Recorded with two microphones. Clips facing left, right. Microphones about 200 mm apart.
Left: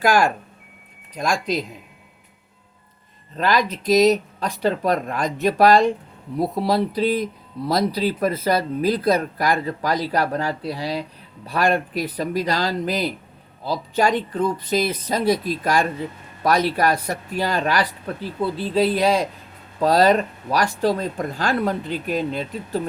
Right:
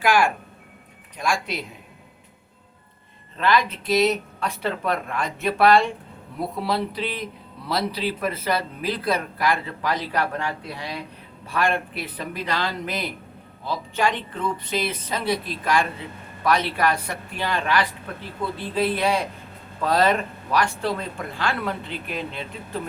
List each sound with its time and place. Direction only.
0.0 s speech: 40° left (ahead or behind)
3.3 s speech: 40° left (ahead or behind)